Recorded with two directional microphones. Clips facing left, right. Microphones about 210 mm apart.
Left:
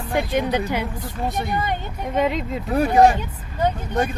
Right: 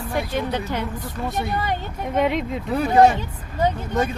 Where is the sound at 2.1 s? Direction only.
Centre (ahead or behind).